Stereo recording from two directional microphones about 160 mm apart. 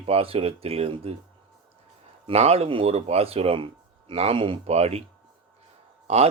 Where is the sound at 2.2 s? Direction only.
40° right (ahead or behind).